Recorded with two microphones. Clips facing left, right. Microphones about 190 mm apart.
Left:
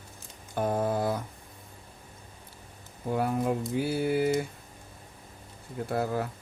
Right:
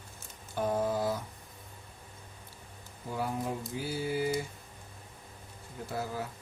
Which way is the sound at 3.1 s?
60° left (ahead or behind).